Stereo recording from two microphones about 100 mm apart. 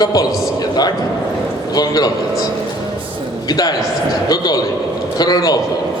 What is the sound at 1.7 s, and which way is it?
Speech, 40° left (ahead or behind).